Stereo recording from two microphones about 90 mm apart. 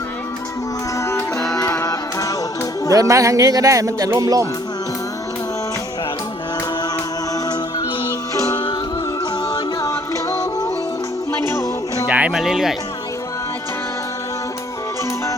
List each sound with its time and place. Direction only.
0.9 s music: 30° left (ahead or behind)
2.9 s speech: 40° right (ahead or behind)
9.5 s music: 40° left (ahead or behind)
11.4 s music: 35° left (ahead or behind)
12.0 s a sound: 15° right (ahead or behind)
12.3 s speech: 5° right (ahead or behind)